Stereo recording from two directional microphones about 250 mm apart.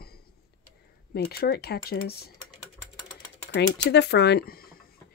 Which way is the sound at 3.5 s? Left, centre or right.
Left.